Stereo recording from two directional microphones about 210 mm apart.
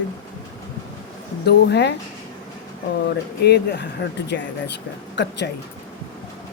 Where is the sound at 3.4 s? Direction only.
50° left (ahead or behind).